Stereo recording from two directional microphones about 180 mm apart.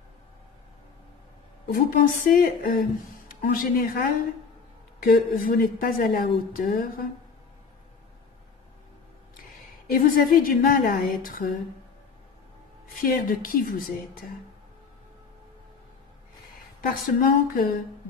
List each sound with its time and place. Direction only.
1.7 s speech: 55° left (ahead or behind)
9.8 s speech: 55° left (ahead or behind)
13.0 s speech: 55° left (ahead or behind)
16.8 s speech: 55° left (ahead or behind)